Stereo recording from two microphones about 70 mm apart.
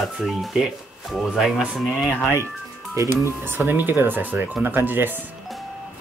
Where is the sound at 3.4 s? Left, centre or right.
Right.